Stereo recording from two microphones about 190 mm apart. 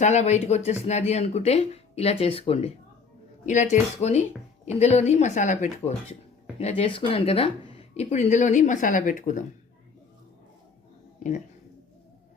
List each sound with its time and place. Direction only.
0.0 s speech: 35° left (ahead or behind)
6.6 s speech: 35° left (ahead or behind)